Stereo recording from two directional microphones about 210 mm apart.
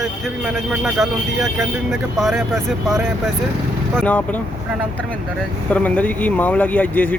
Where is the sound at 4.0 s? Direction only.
5° left (ahead or behind).